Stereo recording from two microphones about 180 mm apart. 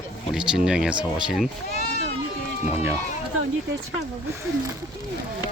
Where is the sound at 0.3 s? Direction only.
5° right (ahead or behind).